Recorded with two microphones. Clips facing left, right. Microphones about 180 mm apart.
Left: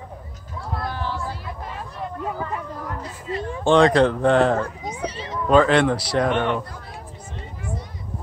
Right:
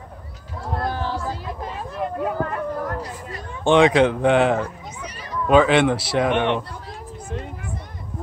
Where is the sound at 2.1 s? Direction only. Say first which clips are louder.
Right 3 dB; 60° right (ahead or behind).